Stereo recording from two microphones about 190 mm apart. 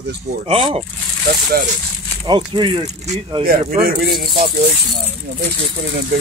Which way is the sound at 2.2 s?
25° right (ahead or behind).